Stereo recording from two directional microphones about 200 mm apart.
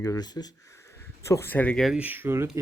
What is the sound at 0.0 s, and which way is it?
Speech, 20° left (ahead or behind).